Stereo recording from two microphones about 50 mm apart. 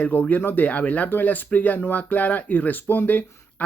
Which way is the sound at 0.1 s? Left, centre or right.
Left.